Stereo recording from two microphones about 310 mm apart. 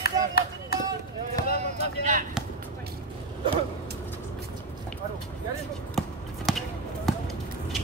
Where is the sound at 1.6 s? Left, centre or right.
Right.